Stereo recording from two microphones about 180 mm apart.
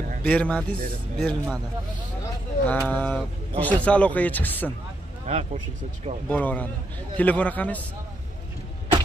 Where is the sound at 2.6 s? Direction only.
10° left (ahead or behind).